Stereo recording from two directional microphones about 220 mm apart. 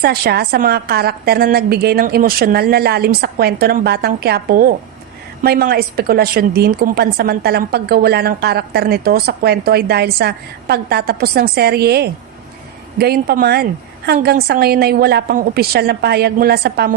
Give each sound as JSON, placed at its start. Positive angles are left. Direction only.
{"t": 0.0, "sound": "a woman's voice", "side_deg": -45}